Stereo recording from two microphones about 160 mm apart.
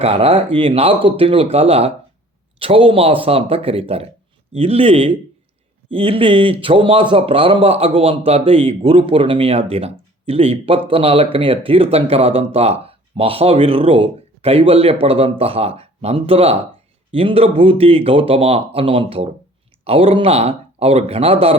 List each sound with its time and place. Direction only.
0.0 s speech: 40° right (ahead or behind)